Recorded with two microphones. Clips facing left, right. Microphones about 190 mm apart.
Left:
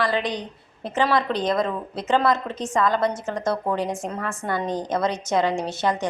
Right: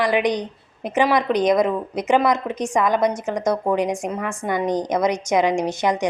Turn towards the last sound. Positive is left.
turn(degrees=-15)  # may be behind; listen again after turning